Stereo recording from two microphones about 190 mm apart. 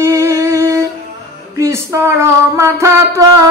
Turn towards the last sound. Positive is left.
turn(degrees=-15)  # may be behind; listen again after turning